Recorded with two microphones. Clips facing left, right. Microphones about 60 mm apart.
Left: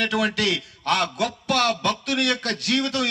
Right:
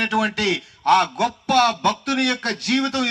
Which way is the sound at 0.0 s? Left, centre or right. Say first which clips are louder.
Right 2 dB; right.